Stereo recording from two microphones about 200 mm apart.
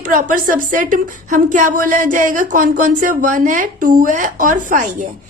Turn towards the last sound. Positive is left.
turn(degrees=-40)  # may be behind; listen again after turning